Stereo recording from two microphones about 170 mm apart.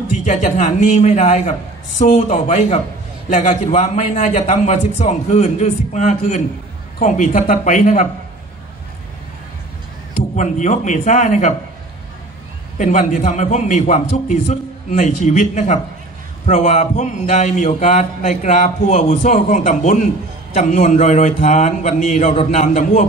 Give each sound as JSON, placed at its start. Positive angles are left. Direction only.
{"t": 0.2, "sound": "a man's voice", "side_deg": 45}
{"t": 10.3, "sound": "a man's voice", "side_deg": 45}
{"t": 12.7, "sound": "a man's voice", "side_deg": 45}